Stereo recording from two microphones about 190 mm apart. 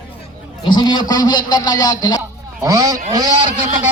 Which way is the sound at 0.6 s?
20° left (ahead or behind).